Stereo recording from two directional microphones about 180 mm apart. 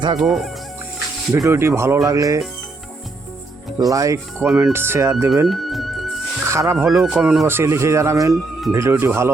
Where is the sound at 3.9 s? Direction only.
20° right (ahead or behind).